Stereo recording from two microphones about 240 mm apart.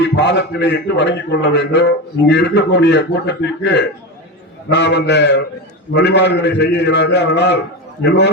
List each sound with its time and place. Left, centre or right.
0.2 s a man's voice: left